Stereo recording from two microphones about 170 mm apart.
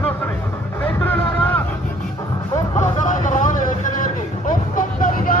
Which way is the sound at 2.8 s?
50° left (ahead or behind).